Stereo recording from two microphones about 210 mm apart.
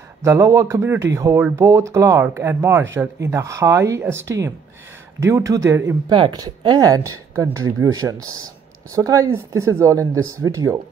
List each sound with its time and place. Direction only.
0.2 s speech: 15° right (ahead or behind)